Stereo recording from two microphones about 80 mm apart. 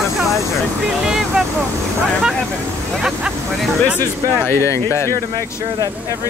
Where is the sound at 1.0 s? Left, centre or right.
Centre.